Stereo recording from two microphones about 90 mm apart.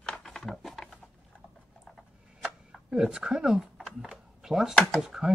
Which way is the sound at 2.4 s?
5° right (ahead or behind).